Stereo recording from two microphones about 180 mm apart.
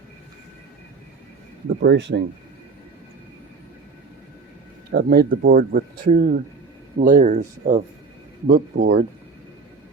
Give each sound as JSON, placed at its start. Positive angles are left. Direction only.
{"t": 1.8, "sound": "speech", "side_deg": -80}
{"t": 4.9, "sound": "speech", "side_deg": -60}